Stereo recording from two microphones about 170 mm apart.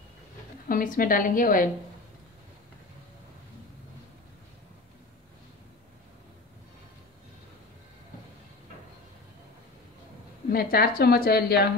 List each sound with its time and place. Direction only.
0.7 s a woman's voice: 55° left (ahead or behind)
10.5 s a woman's voice: 60° left (ahead or behind)